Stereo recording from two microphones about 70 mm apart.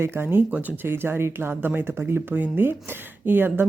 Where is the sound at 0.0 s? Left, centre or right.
Right.